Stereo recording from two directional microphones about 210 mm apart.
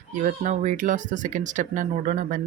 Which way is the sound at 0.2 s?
35° right (ahead or behind).